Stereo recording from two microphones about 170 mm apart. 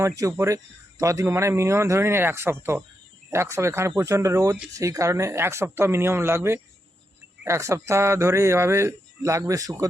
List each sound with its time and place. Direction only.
0.0 s speech: 20° right (ahead or behind)